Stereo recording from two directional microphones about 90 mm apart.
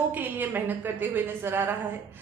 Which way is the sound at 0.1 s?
20° right (ahead or behind).